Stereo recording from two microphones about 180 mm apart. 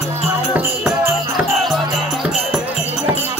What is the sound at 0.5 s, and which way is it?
Music, 10° right (ahead or behind).